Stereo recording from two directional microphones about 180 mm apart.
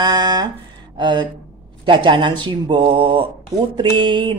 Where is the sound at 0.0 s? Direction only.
25° right (ahead or behind).